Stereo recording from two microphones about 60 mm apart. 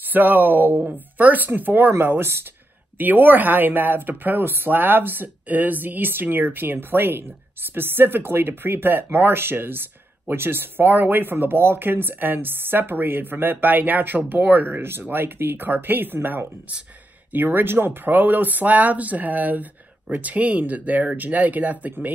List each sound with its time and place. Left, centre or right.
0.0 s speech: right
3.0 s speech: right